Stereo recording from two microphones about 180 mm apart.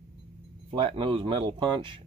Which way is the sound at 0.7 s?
30° right (ahead or behind).